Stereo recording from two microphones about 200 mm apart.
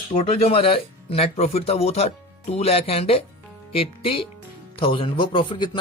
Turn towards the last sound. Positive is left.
turn(degrees=25)  # may be behind; listen again after turning